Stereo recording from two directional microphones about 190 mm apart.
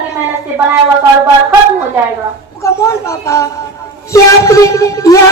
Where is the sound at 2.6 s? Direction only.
15° left (ahead or behind).